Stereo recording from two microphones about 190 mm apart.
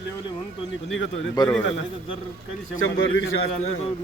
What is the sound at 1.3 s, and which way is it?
Speech, 20° left (ahead or behind).